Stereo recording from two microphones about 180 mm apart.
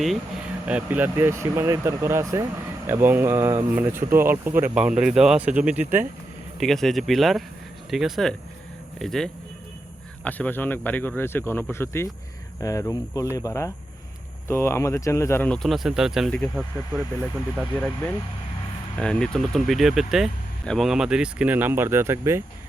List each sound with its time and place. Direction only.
0.6 s speech: 5° right (ahead or behind)
18.9 s speech: 5° left (ahead or behind); by 22.4 s 15° right (ahead or behind)